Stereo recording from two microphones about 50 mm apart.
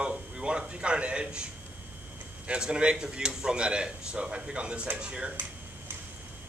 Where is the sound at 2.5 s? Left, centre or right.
Right.